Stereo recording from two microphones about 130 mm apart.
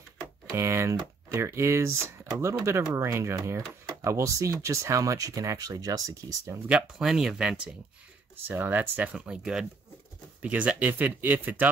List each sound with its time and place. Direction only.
0.6 s speech: 20° right (ahead or behind)
6.7 s speech: 5° right (ahead or behind)